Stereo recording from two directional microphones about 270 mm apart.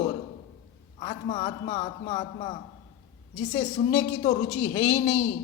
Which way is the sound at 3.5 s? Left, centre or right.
Left.